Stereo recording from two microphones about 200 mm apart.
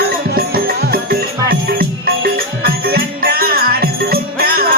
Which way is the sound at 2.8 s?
50° right (ahead or behind).